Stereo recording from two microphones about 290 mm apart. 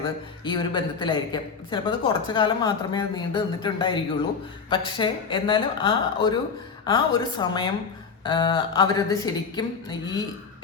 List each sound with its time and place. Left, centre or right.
0.4 s speech: centre